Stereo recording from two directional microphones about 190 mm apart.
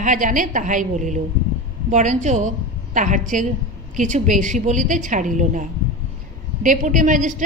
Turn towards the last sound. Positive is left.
turn(degrees=-40)  # may be behind; listen again after turning